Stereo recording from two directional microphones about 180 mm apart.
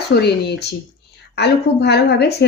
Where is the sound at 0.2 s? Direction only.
65° left (ahead or behind).